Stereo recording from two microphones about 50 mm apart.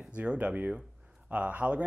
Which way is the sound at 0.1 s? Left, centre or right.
Right.